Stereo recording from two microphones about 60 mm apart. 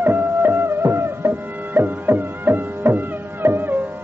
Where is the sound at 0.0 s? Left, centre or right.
Right.